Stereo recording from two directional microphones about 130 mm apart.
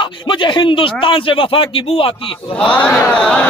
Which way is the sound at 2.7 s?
10° left (ahead or behind).